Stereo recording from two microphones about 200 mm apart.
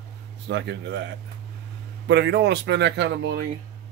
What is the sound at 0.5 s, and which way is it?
Speech, 60° right (ahead or behind).